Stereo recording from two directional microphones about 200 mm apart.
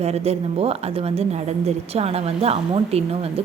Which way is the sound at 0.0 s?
30° right (ahead or behind).